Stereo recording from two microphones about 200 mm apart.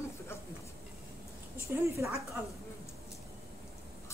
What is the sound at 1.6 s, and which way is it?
Speech, 15° right (ahead or behind).